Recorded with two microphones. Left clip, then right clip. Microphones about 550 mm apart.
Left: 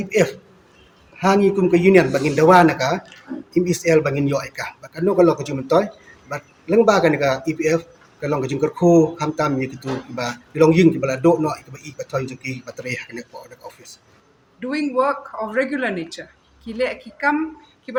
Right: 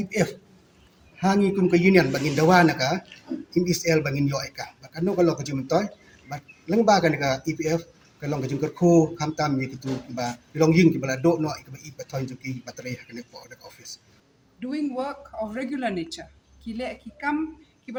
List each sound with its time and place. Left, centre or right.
0.0 s speech: right
14.6 s speech: right